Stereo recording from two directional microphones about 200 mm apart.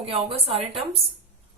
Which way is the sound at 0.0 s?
30° right (ahead or behind).